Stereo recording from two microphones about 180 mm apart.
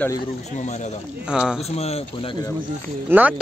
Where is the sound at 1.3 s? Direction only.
5° right (ahead or behind).